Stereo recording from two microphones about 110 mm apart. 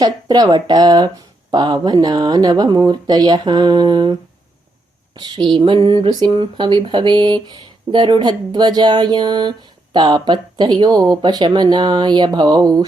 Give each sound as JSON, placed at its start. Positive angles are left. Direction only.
{"t": 0.0, "sound": "speech", "side_deg": -40}
{"t": 5.1, "sound": "a sound", "side_deg": -40}
{"t": 6.1, "sound": "speech", "side_deg": -40}